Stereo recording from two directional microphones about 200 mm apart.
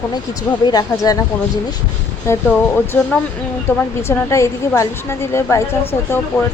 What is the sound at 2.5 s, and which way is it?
A woman's voice, 5° left (ahead or behind).